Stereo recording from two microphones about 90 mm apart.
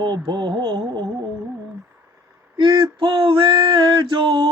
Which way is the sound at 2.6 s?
65° right (ahead or behind).